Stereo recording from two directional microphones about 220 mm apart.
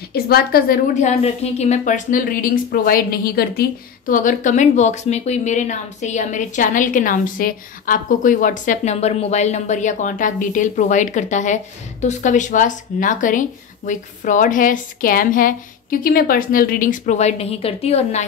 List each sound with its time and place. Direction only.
0.1 s a woman's voice: 45° left (ahead or behind); by 18.2 s 30° left (ahead or behind)